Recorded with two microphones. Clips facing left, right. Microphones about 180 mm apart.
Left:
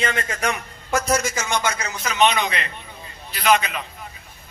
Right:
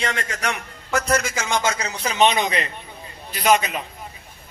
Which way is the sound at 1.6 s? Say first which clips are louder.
Right 2 dB; 30° right (ahead or behind).